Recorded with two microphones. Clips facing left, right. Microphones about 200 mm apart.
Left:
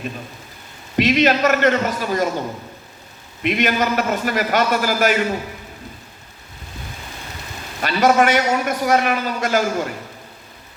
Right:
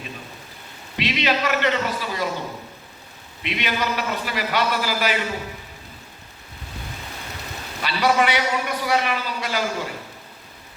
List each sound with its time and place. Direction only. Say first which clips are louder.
0.9 s a man's voice: left 7 dB; 45° left (ahead or behind)
3.4 s a man's voice: left 7 dB; 45° left (ahead or behind)
7.8 s a man's voice: left 5 dB; 45° left (ahead or behind)